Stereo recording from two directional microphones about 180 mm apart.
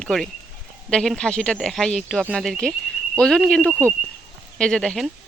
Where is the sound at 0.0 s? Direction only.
Centre (ahead or behind).